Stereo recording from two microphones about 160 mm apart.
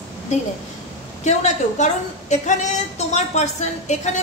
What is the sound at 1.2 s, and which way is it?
A woman's voice, 45° left (ahead or behind).